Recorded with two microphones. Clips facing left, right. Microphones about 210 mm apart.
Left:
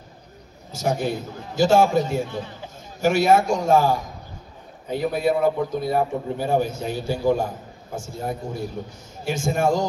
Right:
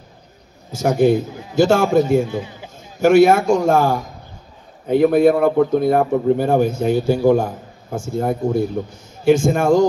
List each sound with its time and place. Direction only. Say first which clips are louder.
0.7 s a man's voice: right 9 dB; 50° right (ahead or behind)
2.3 s speech: right 5 dB; 10° right (ahead or behind)
3.0 s a man's voice: right 6 dB; 55° right (ahead or behind)